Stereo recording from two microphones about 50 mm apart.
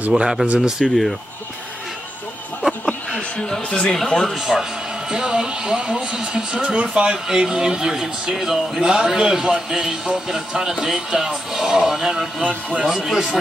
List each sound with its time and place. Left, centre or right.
0.1 s speech: centre
2.6 s a sound: centre
3.9 s speech: centre
4.4 s speech: centre